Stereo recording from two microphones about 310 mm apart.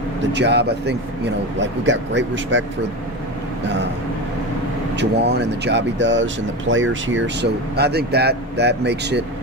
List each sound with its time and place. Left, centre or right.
0.2 s speech: right
4.9 s speech: right